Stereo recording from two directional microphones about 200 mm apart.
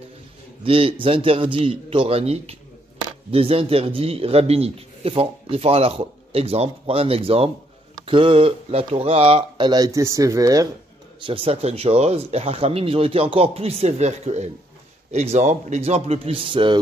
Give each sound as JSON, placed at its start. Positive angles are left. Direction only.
{"t": 0.7, "sound": "a man's voice", "side_deg": -25}